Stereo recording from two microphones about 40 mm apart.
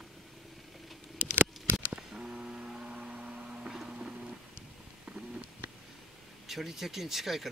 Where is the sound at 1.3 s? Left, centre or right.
Right.